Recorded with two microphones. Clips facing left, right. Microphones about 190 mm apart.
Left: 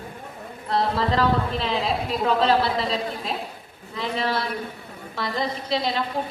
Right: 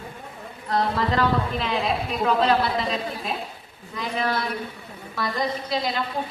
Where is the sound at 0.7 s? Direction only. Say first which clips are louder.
Left 1 dB; 30° left (ahead or behind).